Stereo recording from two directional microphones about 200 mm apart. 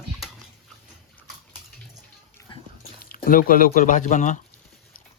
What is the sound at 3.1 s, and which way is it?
Speech, 45° left (ahead or behind).